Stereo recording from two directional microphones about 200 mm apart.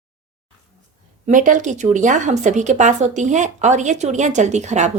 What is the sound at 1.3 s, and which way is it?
A woman's voice, 40° right (ahead or behind).